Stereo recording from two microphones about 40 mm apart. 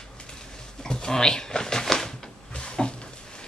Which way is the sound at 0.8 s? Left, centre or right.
Centre.